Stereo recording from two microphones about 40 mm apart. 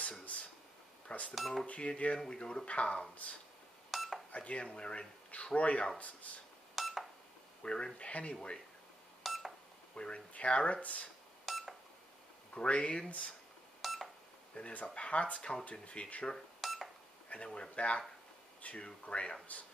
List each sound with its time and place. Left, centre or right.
1.3 s speech: centre
1.7 s speech: left
3.9 s cutlery: centre
4.3 s speech: left
6.7 s telephone dialing: centre
7.6 s speech: left
9.2 s beep: centre
9.9 s speech: left
11.4 s beep: centre
12.5 s speech: left
13.7 s beep: centre
14.5 s speech: left
16.6 s cash register: centre
17.6 s speech: left